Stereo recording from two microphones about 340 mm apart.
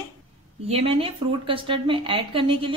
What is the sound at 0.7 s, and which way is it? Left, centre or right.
A woman's voice, centre.